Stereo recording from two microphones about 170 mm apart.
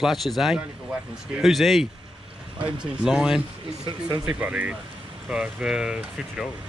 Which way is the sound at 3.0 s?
5° right (ahead or behind).